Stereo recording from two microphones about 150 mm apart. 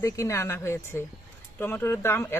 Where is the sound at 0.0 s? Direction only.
20° left (ahead or behind).